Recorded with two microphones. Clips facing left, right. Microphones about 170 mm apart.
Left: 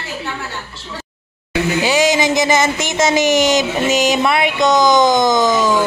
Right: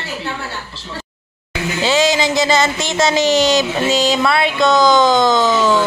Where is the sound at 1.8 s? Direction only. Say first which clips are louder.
Right 2 dB; 15° left (ahead or behind).